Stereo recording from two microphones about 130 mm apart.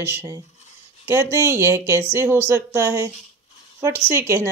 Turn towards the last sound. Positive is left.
turn(degrees=-20)  # may be behind; listen again after turning